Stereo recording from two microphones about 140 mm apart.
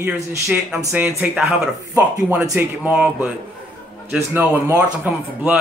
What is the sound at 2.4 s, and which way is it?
Speech, 20° right (ahead or behind).